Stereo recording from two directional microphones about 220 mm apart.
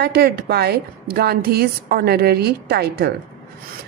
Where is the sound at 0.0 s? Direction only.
45° right (ahead or behind).